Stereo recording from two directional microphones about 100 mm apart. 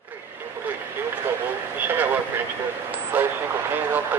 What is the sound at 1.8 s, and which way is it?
Vehicle, 20° right (ahead or behind).